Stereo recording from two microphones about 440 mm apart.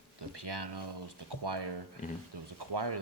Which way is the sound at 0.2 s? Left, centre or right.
Right.